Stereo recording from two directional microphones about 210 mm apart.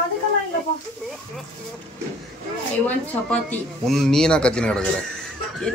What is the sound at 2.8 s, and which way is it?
Speech, 5° left (ahead or behind).